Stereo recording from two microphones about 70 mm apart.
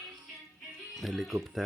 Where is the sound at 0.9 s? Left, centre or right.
Centre.